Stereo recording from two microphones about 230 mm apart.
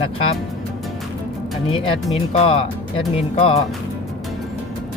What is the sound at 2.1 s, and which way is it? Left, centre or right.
Speech, left.